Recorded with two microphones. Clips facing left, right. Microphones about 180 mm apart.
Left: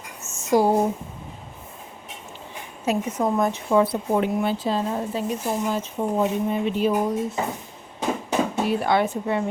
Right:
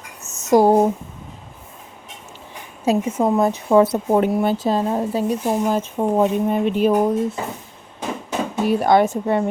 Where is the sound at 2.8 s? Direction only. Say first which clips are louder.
Right 5 dB; 30° right (ahead or behind).